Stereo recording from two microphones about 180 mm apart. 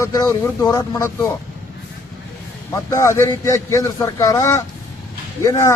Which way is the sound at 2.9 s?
15° left (ahead or behind).